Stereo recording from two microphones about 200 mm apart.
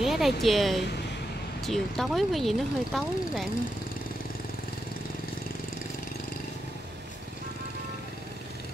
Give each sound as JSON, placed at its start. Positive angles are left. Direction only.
{"t": 0.0, "sound": "a woman's voice", "side_deg": 0}